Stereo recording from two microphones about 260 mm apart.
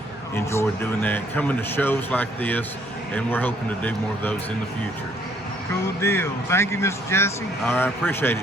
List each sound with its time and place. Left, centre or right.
0.3 s speech: centre
6.0 s speech: centre